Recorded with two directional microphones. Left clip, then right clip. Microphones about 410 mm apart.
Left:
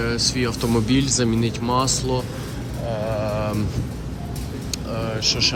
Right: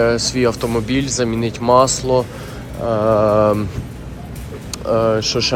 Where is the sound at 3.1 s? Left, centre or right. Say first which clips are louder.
Right 14 dB; right.